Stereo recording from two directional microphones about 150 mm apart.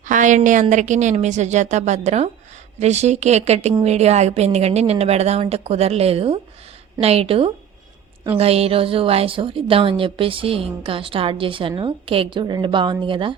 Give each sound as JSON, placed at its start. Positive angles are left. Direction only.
{"t": 0.1, "sound": "a woman's voice", "side_deg": -55}